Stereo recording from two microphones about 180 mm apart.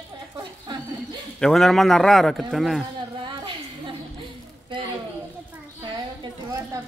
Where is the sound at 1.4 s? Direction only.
Centre (ahead or behind).